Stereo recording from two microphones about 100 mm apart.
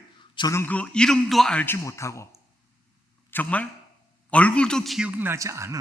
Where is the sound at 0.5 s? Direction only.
25° left (ahead or behind).